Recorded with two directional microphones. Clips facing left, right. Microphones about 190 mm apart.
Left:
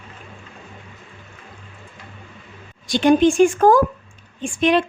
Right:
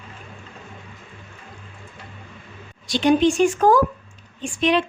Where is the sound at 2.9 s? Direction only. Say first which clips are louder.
Left 3 dB; 50° left (ahead or behind).